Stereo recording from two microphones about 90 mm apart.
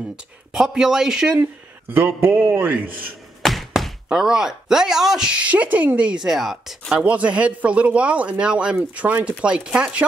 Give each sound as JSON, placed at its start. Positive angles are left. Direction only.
{"t": 0.1, "sound": "speech", "side_deg": -5}
{"t": 1.4, "sound": "speech", "side_deg": -25}
{"t": 3.4, "sound": "speech", "side_deg": 0}